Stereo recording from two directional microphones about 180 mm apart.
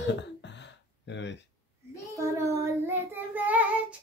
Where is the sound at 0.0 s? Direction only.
75° left (ahead or behind).